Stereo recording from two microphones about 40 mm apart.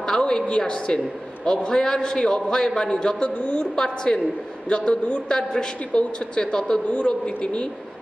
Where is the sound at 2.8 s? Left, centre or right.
Left.